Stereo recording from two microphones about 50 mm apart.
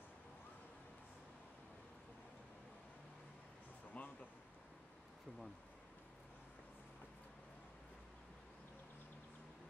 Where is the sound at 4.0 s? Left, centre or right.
Left.